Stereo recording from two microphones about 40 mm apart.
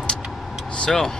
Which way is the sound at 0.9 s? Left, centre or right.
Centre.